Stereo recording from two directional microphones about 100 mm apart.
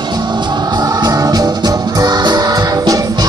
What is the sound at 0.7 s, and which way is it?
Music, 45° right (ahead or behind).